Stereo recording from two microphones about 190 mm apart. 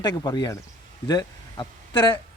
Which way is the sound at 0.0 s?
20° left (ahead or behind).